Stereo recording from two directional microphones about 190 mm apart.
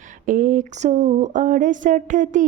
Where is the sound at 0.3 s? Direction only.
45° right (ahead or behind).